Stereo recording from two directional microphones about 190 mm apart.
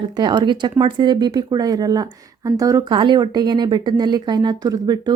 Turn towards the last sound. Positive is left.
turn(degrees=-20)  # may be behind; listen again after turning